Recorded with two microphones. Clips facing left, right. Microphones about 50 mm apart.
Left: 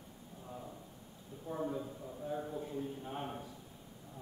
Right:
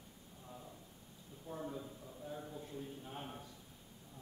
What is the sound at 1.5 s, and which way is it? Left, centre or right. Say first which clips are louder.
A man's voice: left 6 dB; centre.